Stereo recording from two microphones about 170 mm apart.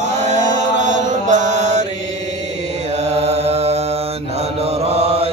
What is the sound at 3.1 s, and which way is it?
Mantra, 40° right (ahead or behind).